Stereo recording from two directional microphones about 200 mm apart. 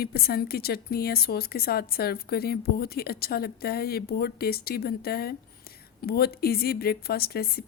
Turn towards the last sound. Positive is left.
turn(degrees=50)  # may be behind; listen again after turning